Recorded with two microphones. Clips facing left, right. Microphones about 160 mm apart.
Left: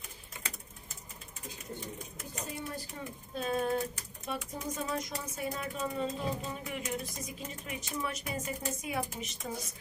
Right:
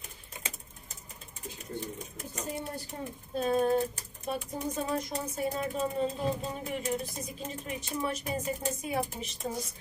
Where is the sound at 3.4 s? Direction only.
35° right (ahead or behind).